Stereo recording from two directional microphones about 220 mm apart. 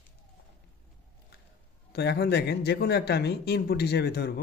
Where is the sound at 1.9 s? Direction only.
50° left (ahead or behind).